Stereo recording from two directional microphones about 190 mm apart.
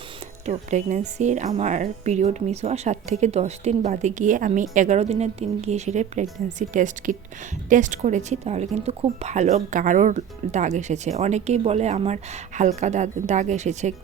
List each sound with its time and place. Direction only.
0.4 s speech: 35° right (ahead or behind)